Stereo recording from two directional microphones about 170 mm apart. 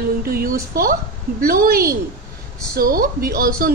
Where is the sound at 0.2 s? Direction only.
60° right (ahead or behind).